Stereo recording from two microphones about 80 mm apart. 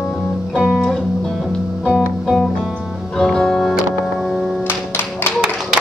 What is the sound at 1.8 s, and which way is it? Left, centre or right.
Music, centre.